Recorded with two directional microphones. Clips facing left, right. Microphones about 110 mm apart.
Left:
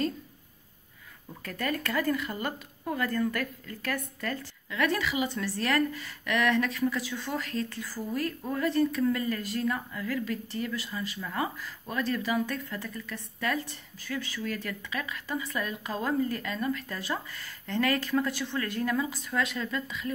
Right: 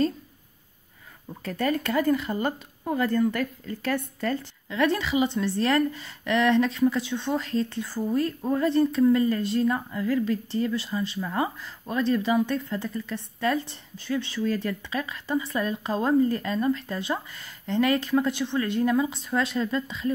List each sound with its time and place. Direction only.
1.4 s speech: 25° right (ahead or behind)